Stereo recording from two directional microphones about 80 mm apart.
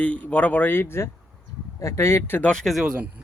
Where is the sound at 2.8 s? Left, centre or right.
Centre.